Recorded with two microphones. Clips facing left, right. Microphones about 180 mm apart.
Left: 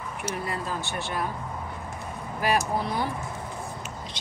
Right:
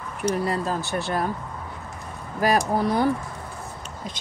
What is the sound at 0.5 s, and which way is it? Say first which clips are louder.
Speech: right 6 dB; 40° right (ahead or behind).